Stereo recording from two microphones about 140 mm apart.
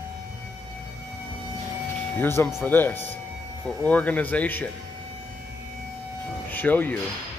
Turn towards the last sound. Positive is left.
turn(degrees=10)  # may be behind; listen again after turning